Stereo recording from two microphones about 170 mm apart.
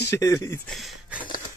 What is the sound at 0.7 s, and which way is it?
Speech, centre (ahead or behind).